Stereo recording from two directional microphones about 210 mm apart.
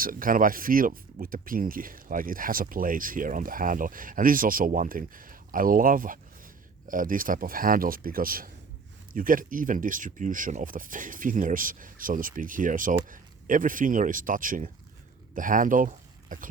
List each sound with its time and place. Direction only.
0.0 s speech: 40° right (ahead or behind)